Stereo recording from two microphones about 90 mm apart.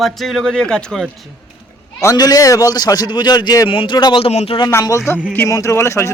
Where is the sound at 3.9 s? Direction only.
50° left (ahead or behind).